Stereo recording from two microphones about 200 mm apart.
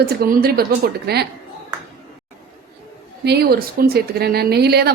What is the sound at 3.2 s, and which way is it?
A woman's voice, 55° right (ahead or behind).